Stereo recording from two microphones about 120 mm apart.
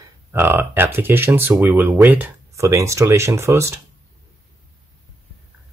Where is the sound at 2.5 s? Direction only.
25° right (ahead or behind).